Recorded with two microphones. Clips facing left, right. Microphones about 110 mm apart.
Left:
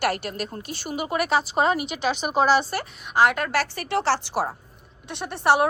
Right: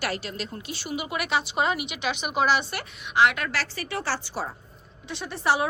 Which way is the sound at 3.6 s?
65° left (ahead or behind).